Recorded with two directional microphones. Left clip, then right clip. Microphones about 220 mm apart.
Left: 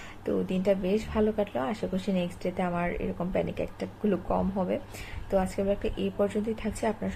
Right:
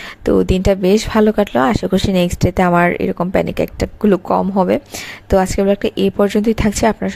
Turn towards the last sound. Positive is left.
turn(degrees=-45)  # may be behind; listen again after turning